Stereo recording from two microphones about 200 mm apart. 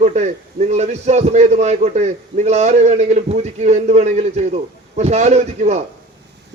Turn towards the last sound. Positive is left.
turn(degrees=-35)  # may be behind; listen again after turning